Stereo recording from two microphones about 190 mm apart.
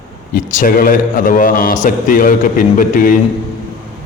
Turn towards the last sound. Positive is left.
turn(degrees=45)  # may be behind; listen again after turning